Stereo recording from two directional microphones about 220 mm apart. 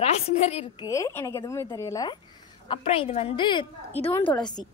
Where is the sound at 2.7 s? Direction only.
25° left (ahead or behind).